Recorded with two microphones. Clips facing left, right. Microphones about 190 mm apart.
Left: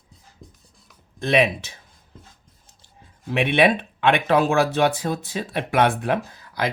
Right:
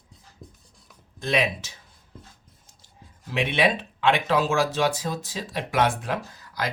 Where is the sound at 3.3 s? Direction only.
60° left (ahead or behind).